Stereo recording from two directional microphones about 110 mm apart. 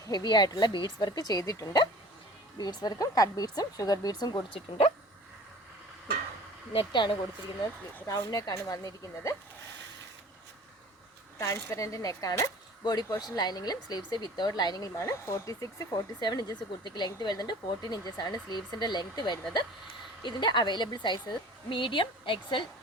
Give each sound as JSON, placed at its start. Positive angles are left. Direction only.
{"t": 0.0, "sound": "speech", "side_deg": 35}
{"t": 6.7, "sound": "a woman's voice", "side_deg": 50}
{"t": 8.0, "sound": "speech", "side_deg": 35}
{"t": 11.3, "sound": "a woman's voice", "side_deg": 25}